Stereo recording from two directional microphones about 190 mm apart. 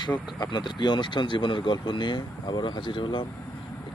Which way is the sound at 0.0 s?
25° left (ahead or behind).